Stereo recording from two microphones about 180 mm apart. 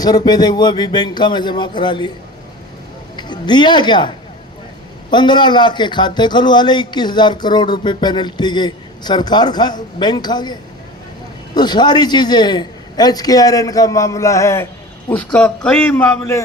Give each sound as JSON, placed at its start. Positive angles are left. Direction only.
{"t": 0.0, "sound": "a man's voice", "side_deg": 20}
{"t": 3.2, "sound": "speech", "side_deg": 25}
{"t": 5.1, "sound": "a man's voice", "side_deg": 25}